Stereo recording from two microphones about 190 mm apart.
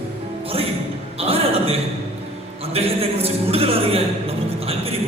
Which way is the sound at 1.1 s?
30° right (ahead or behind).